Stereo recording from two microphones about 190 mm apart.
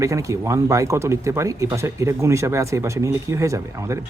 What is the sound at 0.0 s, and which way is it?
Speech, 15° right (ahead or behind).